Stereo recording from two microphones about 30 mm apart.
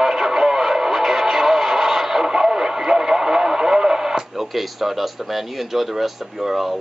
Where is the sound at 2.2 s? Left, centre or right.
Right.